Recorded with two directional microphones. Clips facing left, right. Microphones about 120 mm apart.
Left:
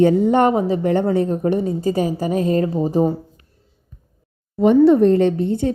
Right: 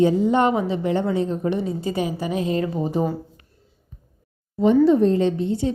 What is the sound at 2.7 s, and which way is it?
Speech, 35° left (ahead or behind).